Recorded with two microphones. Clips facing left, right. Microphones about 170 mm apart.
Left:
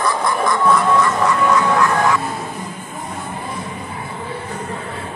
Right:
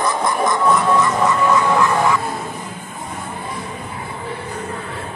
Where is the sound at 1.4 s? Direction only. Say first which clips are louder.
Left 1 dB; 5° right (ahead or behind).